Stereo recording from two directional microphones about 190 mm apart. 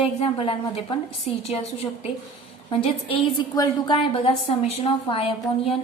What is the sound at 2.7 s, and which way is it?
A woman's voice, 30° left (ahead or behind).